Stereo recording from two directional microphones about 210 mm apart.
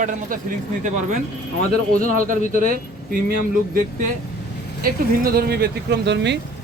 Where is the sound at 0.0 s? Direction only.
40° right (ahead or behind).